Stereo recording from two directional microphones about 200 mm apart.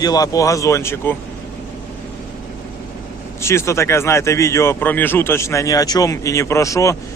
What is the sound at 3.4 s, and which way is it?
Speech, 15° left (ahead or behind).